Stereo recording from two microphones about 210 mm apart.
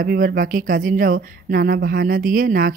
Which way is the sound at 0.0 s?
45° right (ahead or behind).